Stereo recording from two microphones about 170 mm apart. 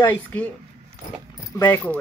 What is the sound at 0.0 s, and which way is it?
Speech, 10° left (ahead or behind).